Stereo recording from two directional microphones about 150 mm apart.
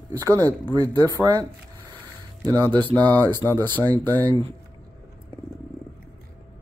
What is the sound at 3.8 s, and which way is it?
Speech, 25° right (ahead or behind).